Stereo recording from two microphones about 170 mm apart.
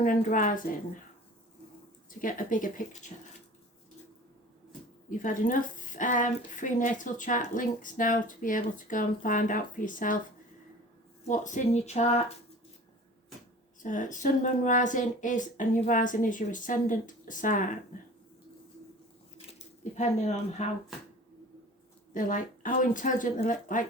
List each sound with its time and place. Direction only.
0.0 s a woman's voice: 50° left (ahead or behind)
2.0 s a woman's voice: 50° left (ahead or behind)
5.2 s a woman's voice: 50° left (ahead or behind)
11.3 s speech: 45° left (ahead or behind)
13.8 s a woman's voice: 50° left (ahead or behind)
19.5 s speech: 40° left (ahead or behind)
22.1 s a woman's voice: 50° left (ahead or behind)